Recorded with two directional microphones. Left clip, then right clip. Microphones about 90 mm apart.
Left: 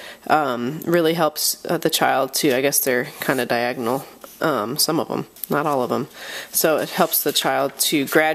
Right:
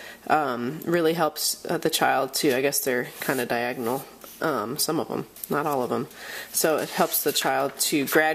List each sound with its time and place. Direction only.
0.3 s speech: 35° left (ahead or behind)